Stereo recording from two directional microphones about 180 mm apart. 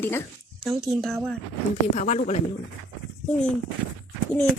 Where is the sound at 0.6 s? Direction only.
Centre (ahead or behind).